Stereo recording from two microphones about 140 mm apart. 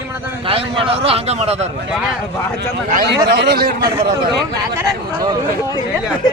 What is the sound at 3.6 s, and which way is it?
Speech, 90° right.